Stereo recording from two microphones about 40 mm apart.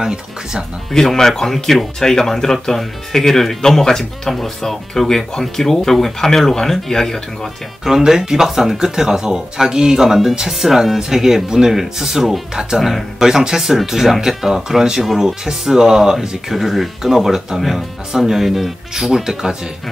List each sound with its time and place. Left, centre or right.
0.0 s speech: centre
0.9 s speech: centre
7.8 s speech: centre
13.3 s speech: centre
17.6 s speech: centre
18.1 s speech: centre